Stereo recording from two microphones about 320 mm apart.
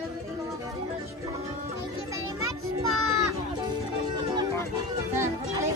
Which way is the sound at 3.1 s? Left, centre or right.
Centre.